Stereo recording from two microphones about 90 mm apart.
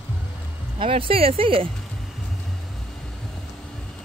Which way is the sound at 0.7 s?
90° right.